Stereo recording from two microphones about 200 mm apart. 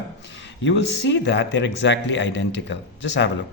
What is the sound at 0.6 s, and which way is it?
A man's voice, 65° left (ahead or behind).